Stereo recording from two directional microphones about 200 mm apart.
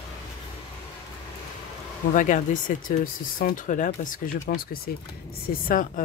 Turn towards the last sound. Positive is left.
turn(degrees=45)  # may be behind; listen again after turning